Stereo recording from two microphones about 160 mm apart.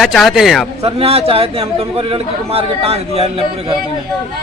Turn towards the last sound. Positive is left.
turn(degrees=-35)  # may be behind; listen again after turning